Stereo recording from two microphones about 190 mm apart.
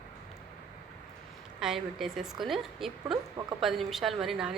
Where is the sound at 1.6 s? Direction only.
Centre (ahead or behind).